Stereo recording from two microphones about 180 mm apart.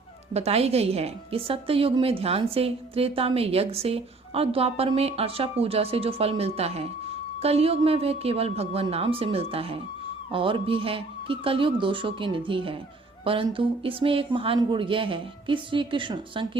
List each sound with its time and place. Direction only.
0.3 s a woman's voice: 35° right (ahead or behind)